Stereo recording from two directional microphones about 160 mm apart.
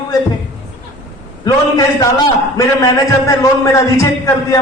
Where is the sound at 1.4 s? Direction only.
20° left (ahead or behind).